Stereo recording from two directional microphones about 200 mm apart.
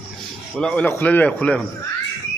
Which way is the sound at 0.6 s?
5° left (ahead or behind).